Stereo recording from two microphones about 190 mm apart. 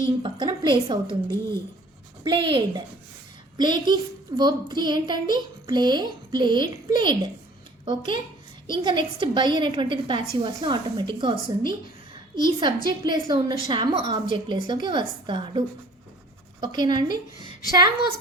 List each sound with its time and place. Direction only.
0.2 s a sound: 25° right (ahead or behind)
1.0 s a woman's voice: 15° left (ahead or behind)
2.2 s a child's voice: 25° right (ahead or behind)